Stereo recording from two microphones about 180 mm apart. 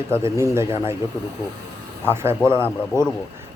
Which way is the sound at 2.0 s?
15° right (ahead or behind).